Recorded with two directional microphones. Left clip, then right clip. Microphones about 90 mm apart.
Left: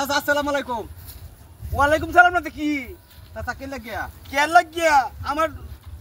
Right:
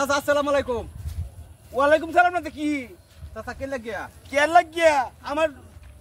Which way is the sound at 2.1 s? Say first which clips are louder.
Left 4 dB; 20° right (ahead or behind).